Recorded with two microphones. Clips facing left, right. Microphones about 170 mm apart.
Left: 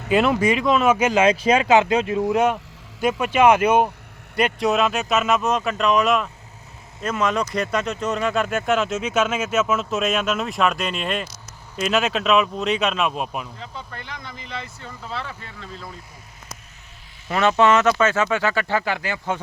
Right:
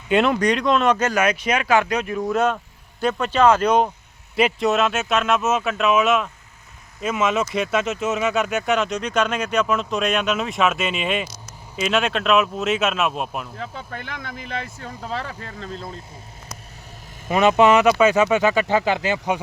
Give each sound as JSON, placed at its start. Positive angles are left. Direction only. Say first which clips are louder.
{"t": 0.1, "sound": "speech", "louder": "even", "side_deg": 0}
{"t": 1.1, "sound": "speech", "louder": "left 4 dB", "side_deg": 25}
{"t": 2.3, "sound": "speech", "louder": "right 2 dB", "side_deg": 10}
{"t": 13.6, "sound": "speech", "louder": "right 4 dB", "side_deg": -55}
{"t": 17.2, "sound": "speech", "louder": "right 2 dB", "side_deg": -15}